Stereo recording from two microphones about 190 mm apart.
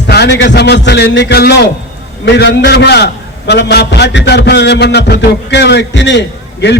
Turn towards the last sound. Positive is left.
turn(degrees=65)  # may be behind; listen again after turning